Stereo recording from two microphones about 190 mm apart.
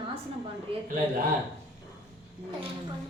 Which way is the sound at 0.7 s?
30° right (ahead or behind).